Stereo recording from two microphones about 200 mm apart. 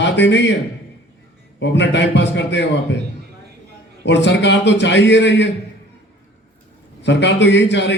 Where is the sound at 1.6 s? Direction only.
60° left (ahead or behind).